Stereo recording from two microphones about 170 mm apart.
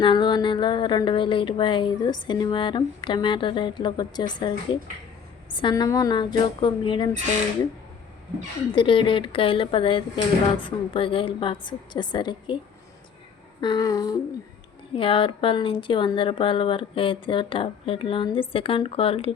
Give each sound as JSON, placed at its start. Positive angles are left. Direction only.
{"t": 0.0, "sound": "speech", "side_deg": 30}
{"t": 8.7, "sound": "speech", "side_deg": 30}
{"t": 13.6, "sound": "speech", "side_deg": 25}
{"t": 14.9, "sound": "speech", "side_deg": 30}